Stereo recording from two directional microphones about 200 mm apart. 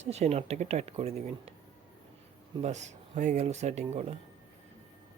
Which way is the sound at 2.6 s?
35° right (ahead or behind).